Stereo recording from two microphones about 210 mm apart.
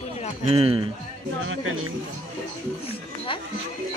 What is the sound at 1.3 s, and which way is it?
Speech, 70° right (ahead or behind).